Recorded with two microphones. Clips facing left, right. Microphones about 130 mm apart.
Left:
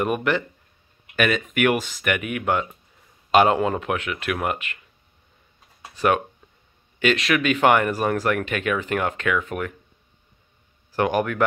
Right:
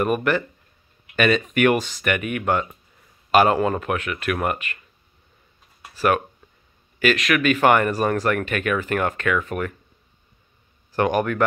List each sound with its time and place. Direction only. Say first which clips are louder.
0.0 s speech: right 2 dB; 15° left (ahead or behind)
5.9 s a man's voice: even; 20° left (ahead or behind)
10.9 s a man's voice: right 1 dB; 10° left (ahead or behind)